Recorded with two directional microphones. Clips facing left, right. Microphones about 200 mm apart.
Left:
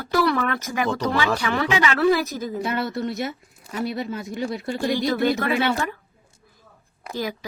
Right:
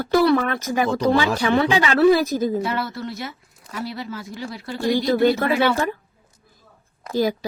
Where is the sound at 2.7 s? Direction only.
20° left (ahead or behind).